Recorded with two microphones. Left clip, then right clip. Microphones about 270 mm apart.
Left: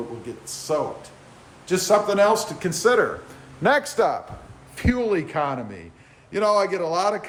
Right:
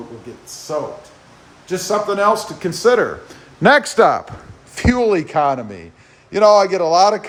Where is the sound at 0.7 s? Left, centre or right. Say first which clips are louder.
Right 1 dB; centre; by 3.1 s right.